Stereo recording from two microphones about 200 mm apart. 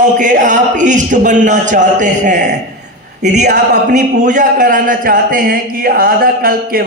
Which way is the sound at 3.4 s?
55° right (ahead or behind).